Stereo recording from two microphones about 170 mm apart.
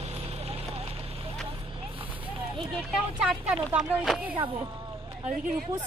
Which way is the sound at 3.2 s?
5° right (ahead or behind).